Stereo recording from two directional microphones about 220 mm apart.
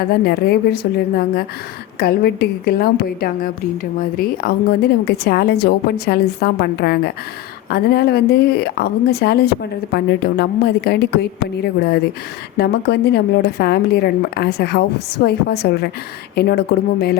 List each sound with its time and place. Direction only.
0.1 s speech: 45° left (ahead or behind)
12.5 s speech: 50° left (ahead or behind)